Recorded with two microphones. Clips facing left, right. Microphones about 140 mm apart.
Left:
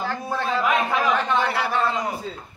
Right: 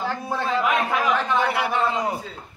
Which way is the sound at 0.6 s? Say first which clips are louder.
Left 1 dB; 5° right (ahead or behind).